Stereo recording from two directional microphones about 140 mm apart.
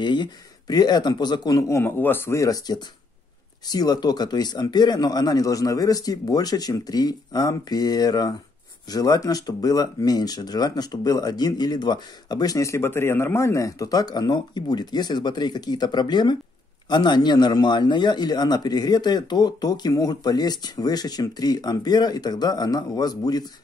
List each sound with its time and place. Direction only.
0.0 s speech: 30° left (ahead or behind)